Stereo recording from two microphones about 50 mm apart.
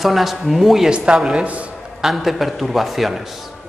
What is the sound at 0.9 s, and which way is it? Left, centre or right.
Speech, centre.